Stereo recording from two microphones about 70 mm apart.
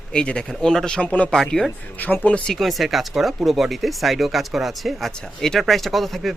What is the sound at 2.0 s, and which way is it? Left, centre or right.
Speech, left.